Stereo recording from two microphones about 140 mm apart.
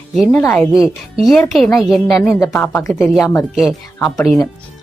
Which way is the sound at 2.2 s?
25° left (ahead or behind).